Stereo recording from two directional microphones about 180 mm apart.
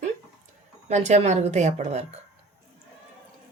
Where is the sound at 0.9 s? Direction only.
40° right (ahead or behind).